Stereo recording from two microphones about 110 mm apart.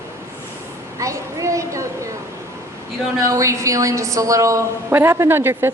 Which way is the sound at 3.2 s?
30° right (ahead or behind).